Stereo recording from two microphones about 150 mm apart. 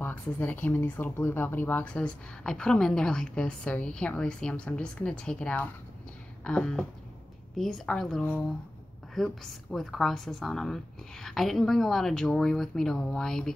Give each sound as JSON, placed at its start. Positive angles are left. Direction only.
{"t": 0.0, "sound": "a woman's voice", "side_deg": 15}